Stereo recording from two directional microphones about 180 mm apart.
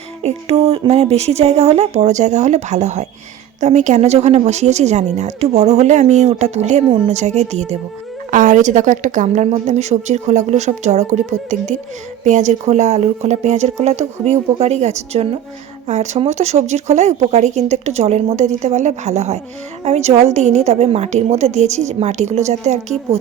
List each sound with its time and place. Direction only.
0.2 s a woman's voice: 35° right (ahead or behind)